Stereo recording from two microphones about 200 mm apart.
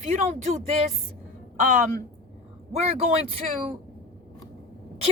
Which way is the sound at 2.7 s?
30° right (ahead or behind).